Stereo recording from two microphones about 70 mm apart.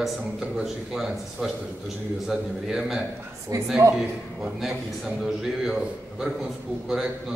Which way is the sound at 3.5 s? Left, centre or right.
Right.